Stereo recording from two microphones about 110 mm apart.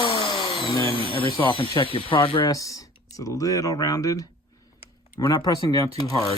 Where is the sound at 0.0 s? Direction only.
50° left (ahead or behind).